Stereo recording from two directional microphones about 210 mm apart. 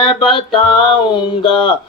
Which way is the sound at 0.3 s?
25° left (ahead or behind).